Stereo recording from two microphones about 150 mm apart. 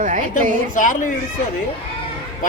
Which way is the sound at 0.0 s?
60° right (ahead or behind).